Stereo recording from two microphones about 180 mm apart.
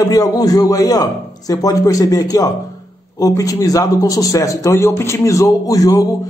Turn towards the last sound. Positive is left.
turn(degrees=20)  # may be behind; listen again after turning